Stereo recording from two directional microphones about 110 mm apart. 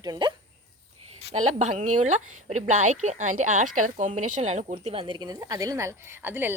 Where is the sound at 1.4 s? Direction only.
90° right.